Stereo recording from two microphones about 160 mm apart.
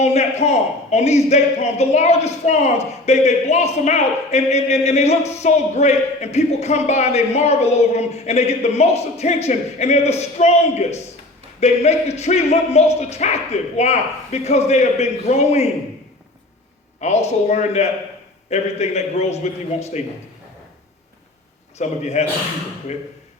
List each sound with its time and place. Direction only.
0.0 s a man's voice: 45° left (ahead or behind)
17.0 s a man's voice: 45° left (ahead or behind)
21.8 s a man's voice: 45° left (ahead or behind)